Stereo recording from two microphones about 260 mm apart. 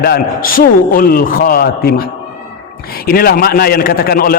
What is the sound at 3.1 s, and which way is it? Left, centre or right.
A man's voice, left.